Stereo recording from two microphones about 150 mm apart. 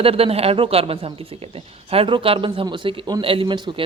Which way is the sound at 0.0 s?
40° right (ahead or behind).